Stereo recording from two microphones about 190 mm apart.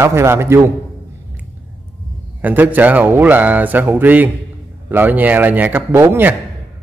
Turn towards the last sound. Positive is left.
turn(degrees=-10)  # may be behind; listen again after turning